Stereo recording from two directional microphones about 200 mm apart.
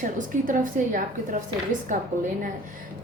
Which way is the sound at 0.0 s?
40° right (ahead or behind).